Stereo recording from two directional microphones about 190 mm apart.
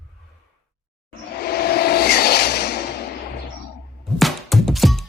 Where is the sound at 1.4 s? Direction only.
55° left (ahead or behind).